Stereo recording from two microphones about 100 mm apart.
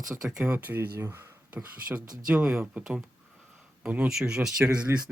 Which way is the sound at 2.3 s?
10° right (ahead or behind).